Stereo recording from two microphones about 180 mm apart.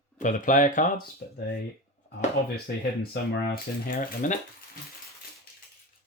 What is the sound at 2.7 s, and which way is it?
Speech, 60° left (ahead or behind).